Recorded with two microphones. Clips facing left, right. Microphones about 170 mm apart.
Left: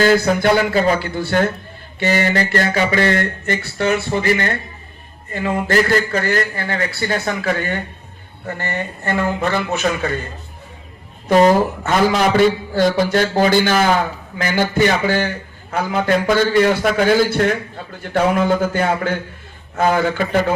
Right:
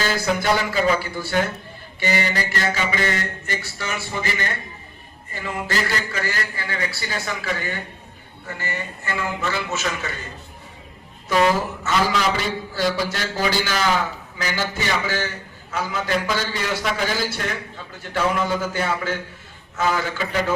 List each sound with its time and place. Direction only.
0.0 s a man's voice: 55° left (ahead or behind)
2.0 s mantra: 50° left (ahead or behind)
5.3 s a man's voice: 55° left (ahead or behind)
11.3 s speech: 40° left (ahead or behind)
11.8 s mantra: 50° left (ahead or behind)
14.3 s a man's voice: 55° left (ahead or behind)
19.7 s mantra: 55° left (ahead or behind)